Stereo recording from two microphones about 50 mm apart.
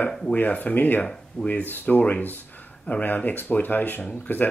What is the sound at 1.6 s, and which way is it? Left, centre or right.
Speech, left.